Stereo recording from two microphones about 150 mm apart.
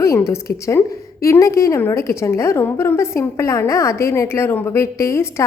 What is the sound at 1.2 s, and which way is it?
A woman's voice, 20° left (ahead or behind).